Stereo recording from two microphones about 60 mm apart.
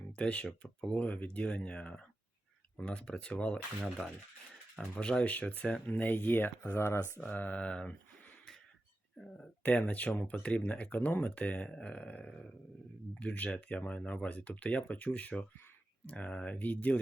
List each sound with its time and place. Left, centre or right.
0.2 s speech: centre
4.9 s speech: centre
6.7 s speech: left
7.2 s speech: left
9.6 s speech: left